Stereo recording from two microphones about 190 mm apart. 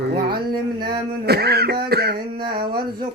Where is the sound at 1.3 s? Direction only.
55° right (ahead or behind).